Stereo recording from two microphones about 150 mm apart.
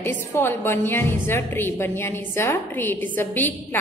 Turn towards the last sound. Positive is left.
turn(degrees=15)  # may be behind; listen again after turning